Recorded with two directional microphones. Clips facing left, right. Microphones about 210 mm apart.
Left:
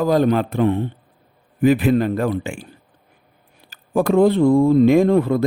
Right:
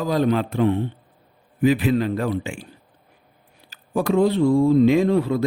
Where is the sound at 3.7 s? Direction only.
55° left (ahead or behind).